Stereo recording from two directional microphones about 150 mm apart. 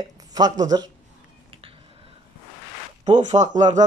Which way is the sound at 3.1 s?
50° right (ahead or behind).